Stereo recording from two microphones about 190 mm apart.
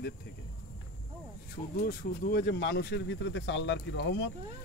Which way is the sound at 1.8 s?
55° left (ahead or behind).